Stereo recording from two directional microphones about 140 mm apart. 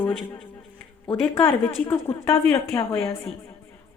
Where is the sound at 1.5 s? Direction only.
20° left (ahead or behind).